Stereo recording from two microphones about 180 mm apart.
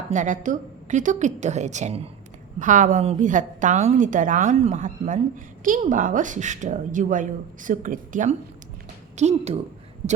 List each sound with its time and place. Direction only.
0.1 s a woman's voice: 45° right (ahead or behind)